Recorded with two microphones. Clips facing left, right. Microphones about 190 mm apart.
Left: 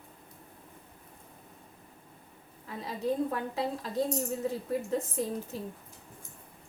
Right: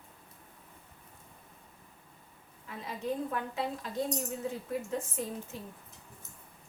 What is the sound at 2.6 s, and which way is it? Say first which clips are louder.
A woman's voice: left 4 dB; 35° left (ahead or behind).